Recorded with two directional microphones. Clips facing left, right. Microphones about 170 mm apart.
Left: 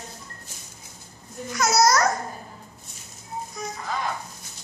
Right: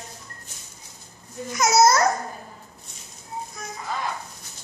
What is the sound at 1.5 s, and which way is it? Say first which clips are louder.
Babbling: right 2 dB; 20° right (ahead or behind).